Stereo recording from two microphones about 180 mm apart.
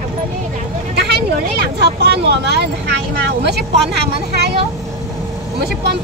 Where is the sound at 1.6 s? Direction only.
65° right (ahead or behind).